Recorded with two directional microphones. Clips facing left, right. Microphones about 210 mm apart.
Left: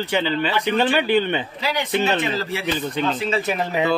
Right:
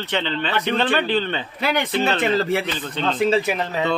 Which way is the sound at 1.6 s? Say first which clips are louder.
Right 3 dB; 55° right (ahead or behind).